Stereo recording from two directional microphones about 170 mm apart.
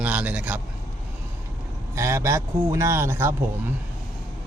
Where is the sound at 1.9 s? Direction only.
15° right (ahead or behind).